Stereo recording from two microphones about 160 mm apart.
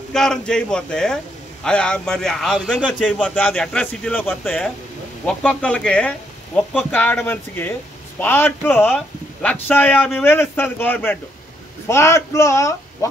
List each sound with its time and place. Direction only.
0.1 s a man's voice: 5° left (ahead or behind)